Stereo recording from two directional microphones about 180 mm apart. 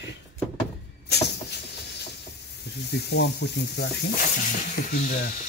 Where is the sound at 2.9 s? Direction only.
70° left (ahead or behind).